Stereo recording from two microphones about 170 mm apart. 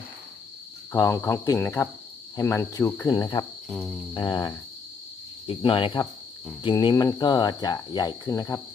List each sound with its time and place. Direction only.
0.9 s cricket: 20° left (ahead or behind)
3.7 s cricket: centre (ahead or behind)
4.1 s cricket: 25° left (ahead or behind)